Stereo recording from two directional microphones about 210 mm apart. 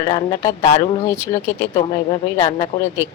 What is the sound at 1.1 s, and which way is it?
Speech, 15° left (ahead or behind).